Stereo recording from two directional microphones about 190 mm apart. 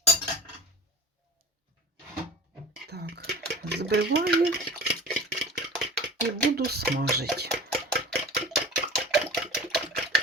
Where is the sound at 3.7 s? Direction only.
60° right (ahead or behind).